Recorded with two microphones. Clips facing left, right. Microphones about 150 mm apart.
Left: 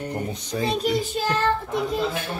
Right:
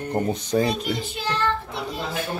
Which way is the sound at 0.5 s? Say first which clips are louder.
Right 5 dB; 40° right (ahead or behind).